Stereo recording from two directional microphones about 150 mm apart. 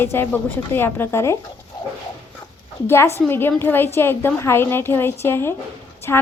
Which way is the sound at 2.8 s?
15° left (ahead or behind).